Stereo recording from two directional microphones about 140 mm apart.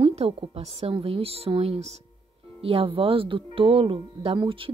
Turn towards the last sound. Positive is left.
turn(degrees=-35)  # may be behind; listen again after turning